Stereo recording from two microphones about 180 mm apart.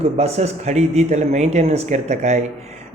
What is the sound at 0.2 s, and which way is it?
Speech, 35° right (ahead or behind).